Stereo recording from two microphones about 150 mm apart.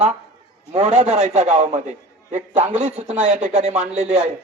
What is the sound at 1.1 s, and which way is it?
A man's voice, 50° right (ahead or behind).